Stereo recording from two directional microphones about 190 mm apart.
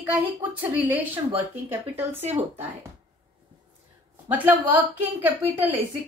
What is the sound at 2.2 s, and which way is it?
Speech, 35° right (ahead or behind).